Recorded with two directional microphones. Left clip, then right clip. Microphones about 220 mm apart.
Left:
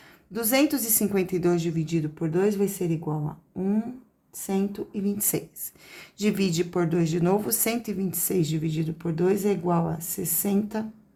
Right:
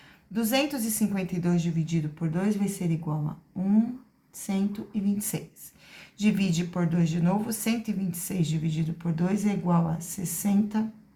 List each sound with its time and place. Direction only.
0.3 s speech: 40° left (ahead or behind)